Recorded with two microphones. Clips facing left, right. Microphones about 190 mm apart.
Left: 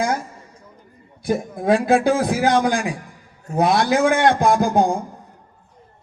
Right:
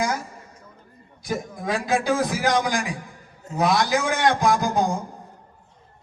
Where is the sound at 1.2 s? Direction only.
55° left (ahead or behind).